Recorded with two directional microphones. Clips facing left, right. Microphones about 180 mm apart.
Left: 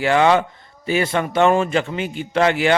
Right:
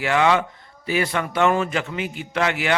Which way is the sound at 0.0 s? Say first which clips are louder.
Left 4 dB; 30° left (ahead or behind).